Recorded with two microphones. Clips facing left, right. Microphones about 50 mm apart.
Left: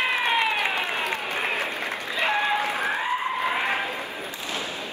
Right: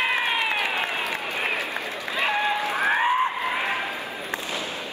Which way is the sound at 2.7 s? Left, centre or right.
Right.